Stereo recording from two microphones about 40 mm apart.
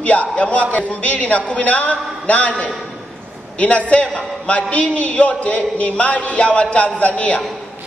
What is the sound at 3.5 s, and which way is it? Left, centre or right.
A man's voice, left.